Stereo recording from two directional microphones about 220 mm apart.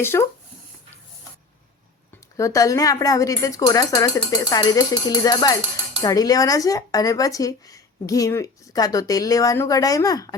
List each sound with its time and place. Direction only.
0.0 s speech: 10° left (ahead or behind)
2.3 s speech: 15° left (ahead or behind)